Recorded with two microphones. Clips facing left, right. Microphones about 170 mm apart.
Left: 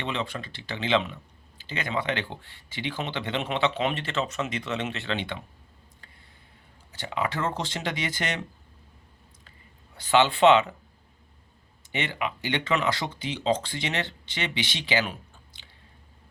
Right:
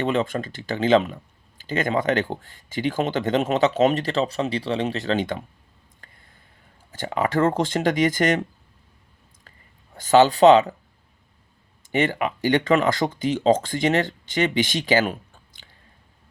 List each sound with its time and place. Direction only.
0.0 s speech: 45° right (ahead or behind)
6.0 s a sound: 50° right (ahead or behind)
6.9 s speech: 45° right (ahead or behind)
9.9 s speech: 45° right (ahead or behind)
11.9 s speech: 45° right (ahead or behind)